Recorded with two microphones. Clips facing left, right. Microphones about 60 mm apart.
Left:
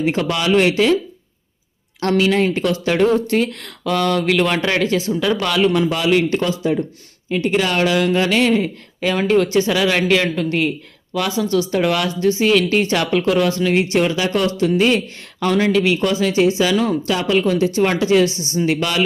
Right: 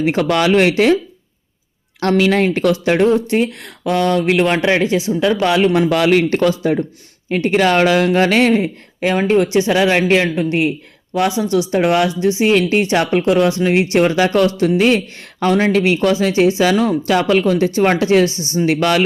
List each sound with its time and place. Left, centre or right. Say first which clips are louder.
0.1 s speech: right 4 dB; right
2.0 s speech: right 2 dB; right
3.2 s speech: right 2 dB; centre
5.4 s speech: right 3 dB; right
5.9 s speech: right 3 dB; right
6.5 s speech: right 2 dB; right
8.6 s speech: right 2 dB; right
15.8 s speech: right 3 dB; right
18.3 s speech: right 1 dB; left
18.6 s speech: right 4 dB; right